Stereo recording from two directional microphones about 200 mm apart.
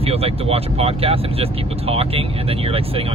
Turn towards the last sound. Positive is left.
turn(degrees=-30)  # may be behind; listen again after turning